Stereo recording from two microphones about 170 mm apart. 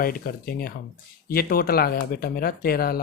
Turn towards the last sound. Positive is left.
turn(degrees=65)  # may be behind; listen again after turning